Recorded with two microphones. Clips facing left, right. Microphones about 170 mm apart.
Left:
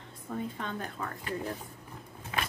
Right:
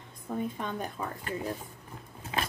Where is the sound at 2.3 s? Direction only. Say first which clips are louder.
Right 2 dB; 30° right (ahead or behind).